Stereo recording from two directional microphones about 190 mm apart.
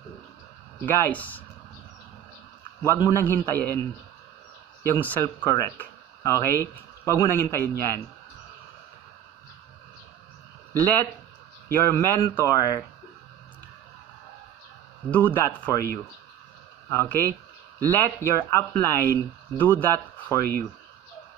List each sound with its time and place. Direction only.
0.7 s a man's voice: 10° left (ahead or behind)
2.8 s a man's voice: 15° left (ahead or behind)
4.8 s a man's voice: 10° left (ahead or behind)
11.7 s a man's voice: 15° left (ahead or behind)
15.0 s a man's voice: 10° left (ahead or behind)